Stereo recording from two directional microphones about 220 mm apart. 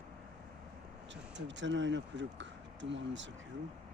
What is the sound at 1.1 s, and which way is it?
Speech, 55° right (ahead or behind).